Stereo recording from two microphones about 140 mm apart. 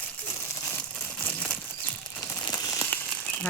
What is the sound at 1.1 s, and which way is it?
Crumpling, 10° left (ahead or behind).